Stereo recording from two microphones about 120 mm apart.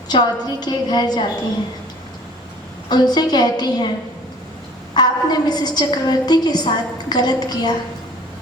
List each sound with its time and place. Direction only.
0.1 s a woman's voice: 35° left (ahead or behind)
2.9 s a woman's voice: 35° left (ahead or behind)
4.9 s a woman's voice: 35° left (ahead or behind)